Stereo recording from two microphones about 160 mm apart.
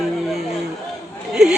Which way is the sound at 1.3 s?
5° right (ahead or behind).